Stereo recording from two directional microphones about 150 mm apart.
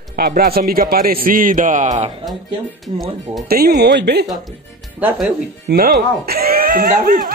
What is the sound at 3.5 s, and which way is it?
Speech, 90° right.